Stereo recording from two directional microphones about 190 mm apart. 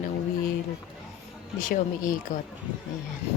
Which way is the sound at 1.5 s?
45° left (ahead or behind).